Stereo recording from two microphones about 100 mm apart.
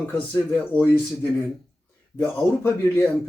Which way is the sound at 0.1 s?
20° left (ahead or behind).